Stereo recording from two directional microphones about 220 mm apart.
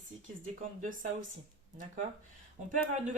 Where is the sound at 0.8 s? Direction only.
35° right (ahead or behind).